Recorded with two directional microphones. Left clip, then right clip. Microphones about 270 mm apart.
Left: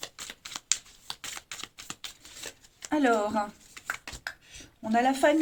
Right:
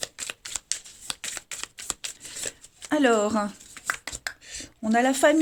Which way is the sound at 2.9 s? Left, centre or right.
Right.